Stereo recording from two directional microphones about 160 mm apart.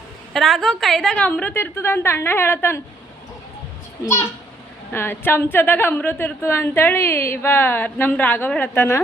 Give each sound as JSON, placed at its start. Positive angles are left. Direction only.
{"t": 0.3, "sound": "a woman's voice", "side_deg": 0}
{"t": 4.0, "sound": "a woman's voice", "side_deg": 20}